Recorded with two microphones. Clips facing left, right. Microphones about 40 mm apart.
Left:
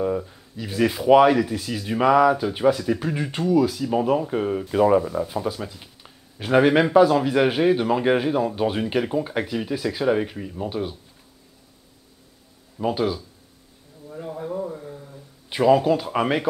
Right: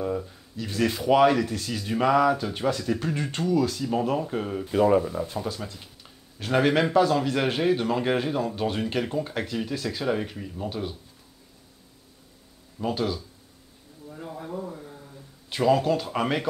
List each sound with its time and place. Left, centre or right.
0.0 s speech: centre
12.7 s a man's voice: centre